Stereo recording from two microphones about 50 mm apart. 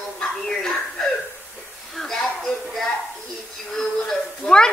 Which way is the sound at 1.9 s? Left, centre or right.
Centre.